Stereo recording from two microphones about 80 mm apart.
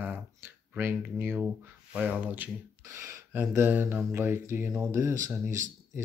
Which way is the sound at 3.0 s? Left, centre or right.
Right.